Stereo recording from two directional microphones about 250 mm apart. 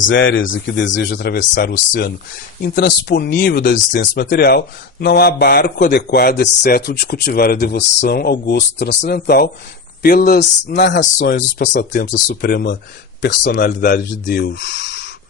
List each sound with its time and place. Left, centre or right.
0.0 s a man's voice: left